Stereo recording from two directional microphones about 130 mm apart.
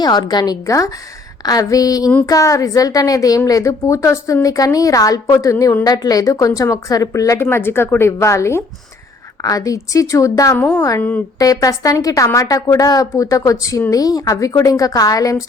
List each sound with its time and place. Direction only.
0.0 s a woman's voice: 30° left (ahead or behind)
10.6 s a woman's voice: 10° left (ahead or behind)
11.3 s a woman's voice: 30° left (ahead or behind)